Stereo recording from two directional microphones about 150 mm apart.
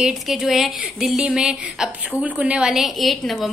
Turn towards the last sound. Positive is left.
turn(degrees=0)  # may be behind; listen again after turning